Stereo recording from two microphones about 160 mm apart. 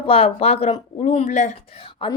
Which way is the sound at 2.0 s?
30° left (ahead or behind).